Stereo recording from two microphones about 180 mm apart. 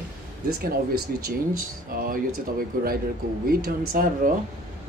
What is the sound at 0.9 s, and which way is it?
Speech, 55° right (ahead or behind).